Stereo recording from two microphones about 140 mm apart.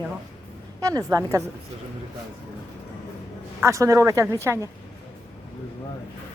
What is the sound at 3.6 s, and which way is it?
Speech, 20° right (ahead or behind).